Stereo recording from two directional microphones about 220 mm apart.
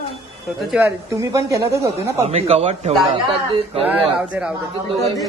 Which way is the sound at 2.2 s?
30° right (ahead or behind).